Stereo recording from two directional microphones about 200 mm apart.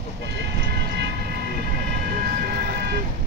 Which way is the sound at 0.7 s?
55° right (ahead or behind).